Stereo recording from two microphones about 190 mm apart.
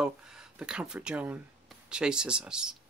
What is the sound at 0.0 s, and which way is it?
Speech, 5° right (ahead or behind).